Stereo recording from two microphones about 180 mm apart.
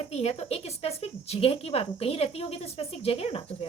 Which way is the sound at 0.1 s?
35° left (ahead or behind).